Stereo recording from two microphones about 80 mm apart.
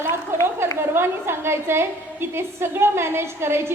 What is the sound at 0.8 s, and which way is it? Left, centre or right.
A woman's voice, right.